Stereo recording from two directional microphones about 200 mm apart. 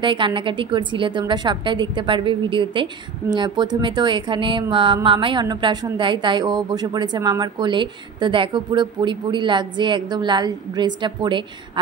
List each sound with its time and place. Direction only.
0.0 s a woman's voice: 25° right (ahead or behind)